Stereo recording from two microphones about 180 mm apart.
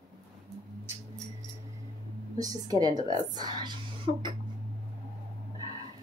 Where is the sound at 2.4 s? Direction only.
20° right (ahead or behind).